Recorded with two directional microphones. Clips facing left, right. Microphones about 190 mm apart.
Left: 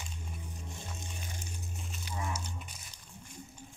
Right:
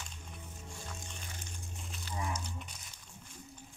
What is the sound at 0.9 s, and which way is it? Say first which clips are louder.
Music: left 3 dB; 10° left (ahead or behind).